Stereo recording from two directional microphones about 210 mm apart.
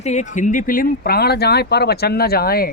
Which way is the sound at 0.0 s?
35° left (ahead or behind).